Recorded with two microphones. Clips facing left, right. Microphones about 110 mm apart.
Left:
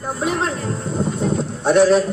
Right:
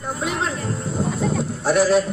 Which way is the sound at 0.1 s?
Centre (ahead or behind).